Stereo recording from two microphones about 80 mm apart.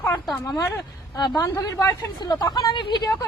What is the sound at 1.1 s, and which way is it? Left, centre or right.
Speech, left.